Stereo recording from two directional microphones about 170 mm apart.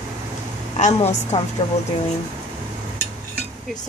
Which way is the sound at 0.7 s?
40° left (ahead or behind).